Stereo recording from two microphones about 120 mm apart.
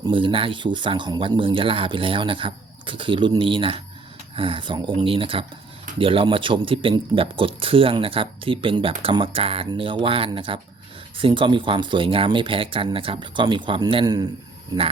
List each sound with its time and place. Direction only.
0.1 s speech: 45° right (ahead or behind)